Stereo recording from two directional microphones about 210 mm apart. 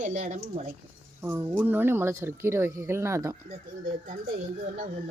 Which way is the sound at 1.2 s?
10° right (ahead or behind).